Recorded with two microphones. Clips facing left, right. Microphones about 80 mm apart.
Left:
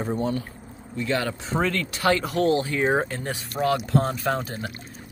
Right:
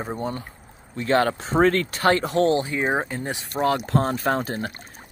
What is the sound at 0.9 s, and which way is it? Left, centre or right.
Speech, right.